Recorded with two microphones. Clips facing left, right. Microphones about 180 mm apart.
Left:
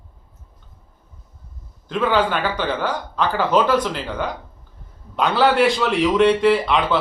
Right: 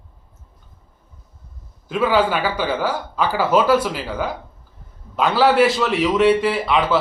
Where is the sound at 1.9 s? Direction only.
10° right (ahead or behind).